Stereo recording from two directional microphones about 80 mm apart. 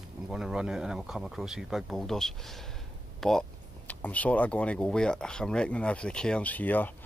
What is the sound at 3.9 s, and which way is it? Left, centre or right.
Speech, centre.